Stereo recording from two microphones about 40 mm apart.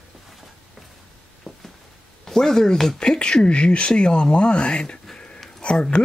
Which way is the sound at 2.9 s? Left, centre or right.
Left.